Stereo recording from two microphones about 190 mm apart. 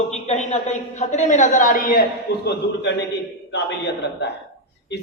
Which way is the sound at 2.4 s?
65° left (ahead or behind).